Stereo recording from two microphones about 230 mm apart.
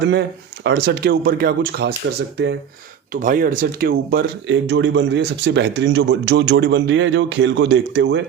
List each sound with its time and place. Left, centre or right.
0.0 s speech: right
3.1 s speech: right